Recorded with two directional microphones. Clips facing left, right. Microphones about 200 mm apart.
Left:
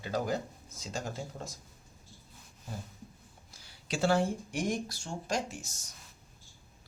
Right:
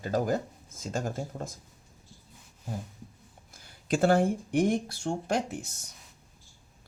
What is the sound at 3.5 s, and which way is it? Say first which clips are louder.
Speech: right 8 dB; 50° right (ahead or behind).